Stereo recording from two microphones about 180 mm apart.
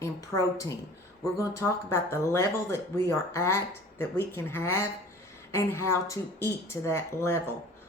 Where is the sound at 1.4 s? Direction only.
15° left (ahead or behind).